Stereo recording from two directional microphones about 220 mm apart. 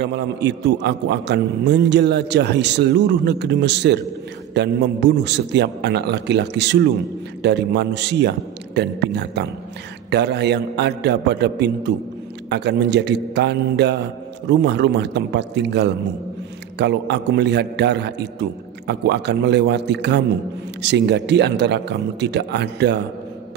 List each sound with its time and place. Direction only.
0.0 s a man's voice: 50° right (ahead or behind)